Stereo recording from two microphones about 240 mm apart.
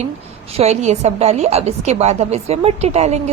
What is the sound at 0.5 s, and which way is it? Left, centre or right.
A woman's voice, right.